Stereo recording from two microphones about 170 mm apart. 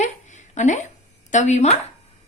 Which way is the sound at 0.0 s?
45° left (ahead or behind).